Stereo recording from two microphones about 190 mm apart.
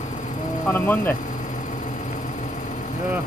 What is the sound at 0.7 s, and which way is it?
Speech, 10° left (ahead or behind).